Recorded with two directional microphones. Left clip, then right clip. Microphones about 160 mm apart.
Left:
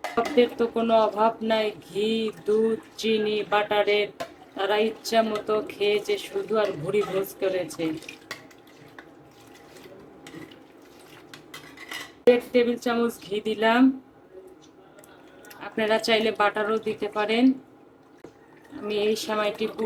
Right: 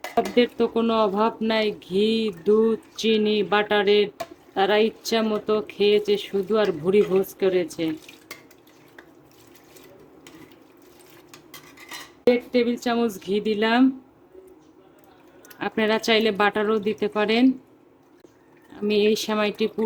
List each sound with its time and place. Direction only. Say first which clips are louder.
0.3 s speech: even; 45° right (ahead or behind)
12.3 s speech: left 1 dB; 55° right (ahead or behind)
15.5 s speech: right 2 dB; 45° right (ahead or behind)
18.9 s speech: right 4 dB; 50° right (ahead or behind)